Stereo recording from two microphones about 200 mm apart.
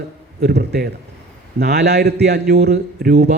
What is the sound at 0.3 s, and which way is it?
A man's voice, 50° right (ahead or behind).